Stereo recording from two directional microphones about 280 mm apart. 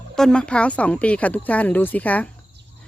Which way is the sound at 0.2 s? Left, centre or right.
Centre.